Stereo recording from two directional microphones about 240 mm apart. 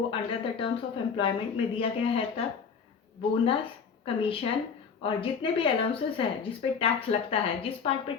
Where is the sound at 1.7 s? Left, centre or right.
Left.